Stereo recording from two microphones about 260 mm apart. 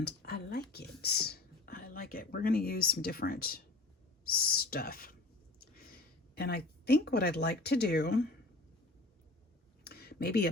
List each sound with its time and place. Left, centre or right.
0.0 s whispering: left
4.3 s speech: left
6.3 s speech: left
9.8 s a sound: left